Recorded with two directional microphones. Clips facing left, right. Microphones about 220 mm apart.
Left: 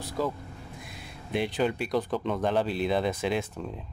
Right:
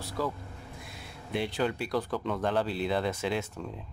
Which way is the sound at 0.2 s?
20° left (ahead or behind).